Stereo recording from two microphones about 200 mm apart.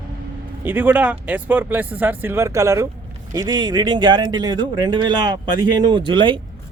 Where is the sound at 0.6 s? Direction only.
10° right (ahead or behind).